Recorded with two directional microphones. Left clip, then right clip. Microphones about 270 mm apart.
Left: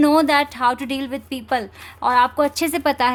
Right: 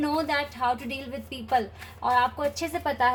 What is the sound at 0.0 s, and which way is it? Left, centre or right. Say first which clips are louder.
Speech: left 11 dB; left.